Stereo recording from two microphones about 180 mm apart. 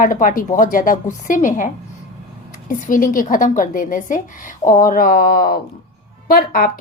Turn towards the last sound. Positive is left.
turn(degrees=55)  # may be behind; listen again after turning